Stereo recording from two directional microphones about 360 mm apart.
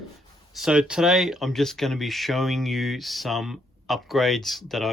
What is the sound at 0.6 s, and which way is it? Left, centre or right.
Speech, centre.